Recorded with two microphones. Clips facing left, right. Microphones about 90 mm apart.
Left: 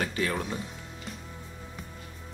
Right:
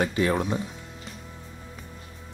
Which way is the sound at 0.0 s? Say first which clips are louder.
Right 6 dB; 25° right (ahead or behind).